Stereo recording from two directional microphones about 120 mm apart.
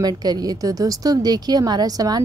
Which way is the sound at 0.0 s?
35° right (ahead or behind).